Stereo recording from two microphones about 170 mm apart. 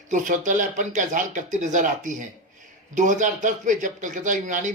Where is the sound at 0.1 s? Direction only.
50° right (ahead or behind).